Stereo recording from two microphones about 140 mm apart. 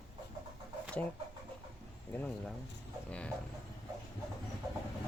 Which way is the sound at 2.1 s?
5° left (ahead or behind).